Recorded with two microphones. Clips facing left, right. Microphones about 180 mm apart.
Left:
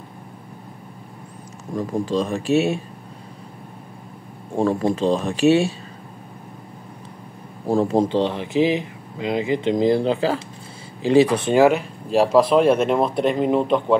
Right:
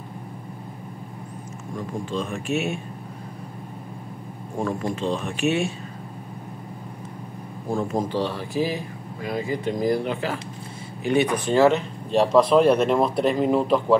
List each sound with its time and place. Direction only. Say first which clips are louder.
1.8 s speech: left 7 dB; 35° left (ahead or behind)
4.6 s speech: left 7 dB; 30° left (ahead or behind)
7.6 s speech: left 7 dB; 30° left (ahead or behind); by 13.9 s centre (ahead or behind)